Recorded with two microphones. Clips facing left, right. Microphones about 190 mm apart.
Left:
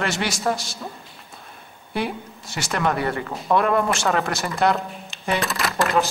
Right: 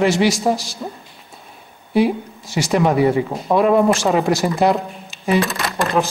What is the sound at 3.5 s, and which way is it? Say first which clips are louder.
Speech: right 4 dB; 15° right (ahead or behind).